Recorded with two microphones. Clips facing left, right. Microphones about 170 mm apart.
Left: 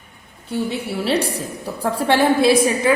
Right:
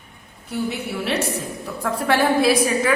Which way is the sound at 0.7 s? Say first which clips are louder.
Left 4 dB; 30° left (ahead or behind).